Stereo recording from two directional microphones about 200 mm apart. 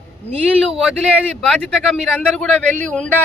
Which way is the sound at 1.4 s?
5° left (ahead or behind).